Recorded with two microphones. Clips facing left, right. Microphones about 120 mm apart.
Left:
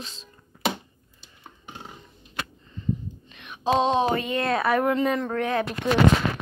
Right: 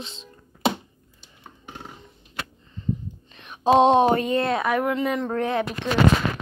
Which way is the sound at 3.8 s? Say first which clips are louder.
Right 6 dB; 55° right (ahead or behind).